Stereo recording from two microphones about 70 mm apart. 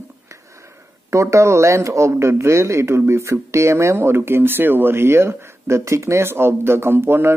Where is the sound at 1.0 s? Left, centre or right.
Right.